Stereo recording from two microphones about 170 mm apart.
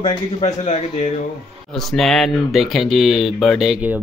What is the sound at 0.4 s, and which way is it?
Speech, 40° left (ahead or behind).